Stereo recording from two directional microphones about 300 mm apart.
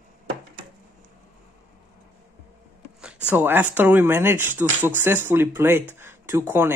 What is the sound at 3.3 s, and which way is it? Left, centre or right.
Speech, centre.